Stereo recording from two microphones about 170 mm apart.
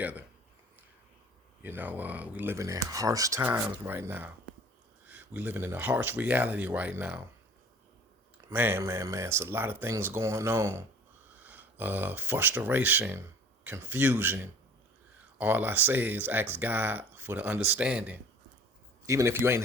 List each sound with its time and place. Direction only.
0.0 s speech: 10° right (ahead or behind)
1.6 s speech: 10° right (ahead or behind)
8.4 s speech: 15° right (ahead or behind)